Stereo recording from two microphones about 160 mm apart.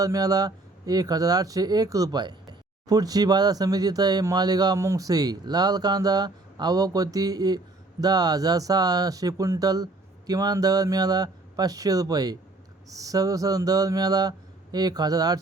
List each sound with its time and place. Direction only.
0.0 s speech: 20° right (ahead or behind)